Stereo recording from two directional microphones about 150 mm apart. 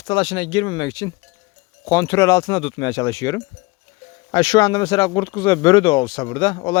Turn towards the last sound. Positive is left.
turn(degrees=30)  # may be behind; listen again after turning